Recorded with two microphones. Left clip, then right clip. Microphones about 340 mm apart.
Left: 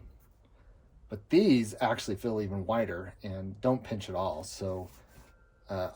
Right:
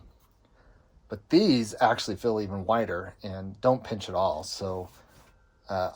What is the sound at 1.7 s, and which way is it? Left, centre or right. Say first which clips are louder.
Speech: right 6 dB; centre.